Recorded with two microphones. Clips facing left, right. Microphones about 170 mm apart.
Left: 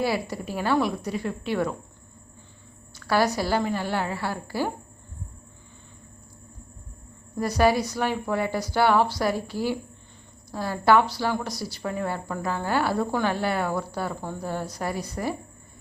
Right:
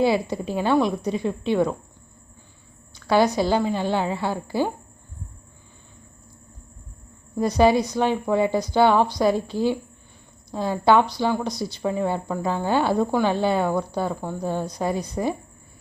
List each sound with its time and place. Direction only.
0.0 s a woman's voice: 20° right (ahead or behind)
3.1 s a woman's voice: 20° right (ahead or behind)
7.3 s a woman's voice: 20° right (ahead or behind)